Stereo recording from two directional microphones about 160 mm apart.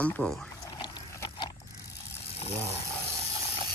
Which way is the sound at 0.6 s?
25° left (ahead or behind).